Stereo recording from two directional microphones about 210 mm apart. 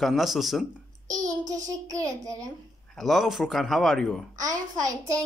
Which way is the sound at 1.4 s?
15° right (ahead or behind).